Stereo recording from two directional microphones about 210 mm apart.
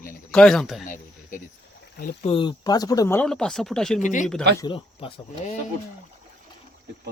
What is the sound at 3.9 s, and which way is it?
Speech, 35° left (ahead or behind).